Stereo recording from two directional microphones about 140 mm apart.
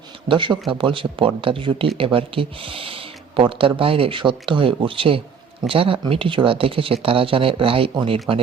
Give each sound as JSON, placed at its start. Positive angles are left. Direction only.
{"t": 0.3, "sound": "speech", "side_deg": -35}